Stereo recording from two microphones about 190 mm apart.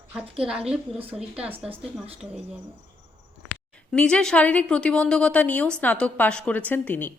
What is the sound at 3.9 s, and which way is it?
A woman's voice, 5° left (ahead or behind).